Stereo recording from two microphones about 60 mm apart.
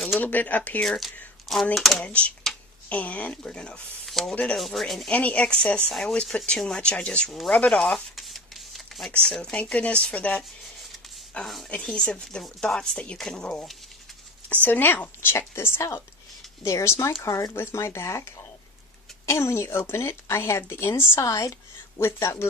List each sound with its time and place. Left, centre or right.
0.2 s speech: left
0.8 s speech: centre
2.0 s speech: left
4.0 s speech: centre
5.1 s speech: left
7.7 s a sound: centre
9.3 s speech: centre
9.6 s speech: left
14.5 s speech: left
17.6 s speech: left
21.2 s speech: left